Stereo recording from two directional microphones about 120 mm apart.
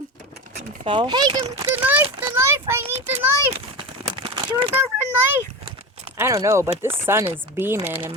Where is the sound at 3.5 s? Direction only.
45° right (ahead or behind).